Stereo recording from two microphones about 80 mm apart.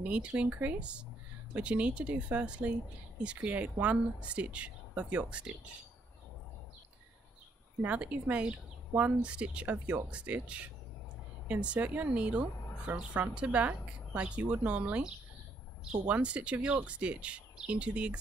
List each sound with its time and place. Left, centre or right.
0.0 s a woman's voice: centre
7.8 s a woman's voice: centre